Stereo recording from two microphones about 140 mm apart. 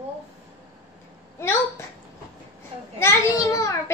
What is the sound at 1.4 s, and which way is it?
Speech, 20° left (ahead or behind).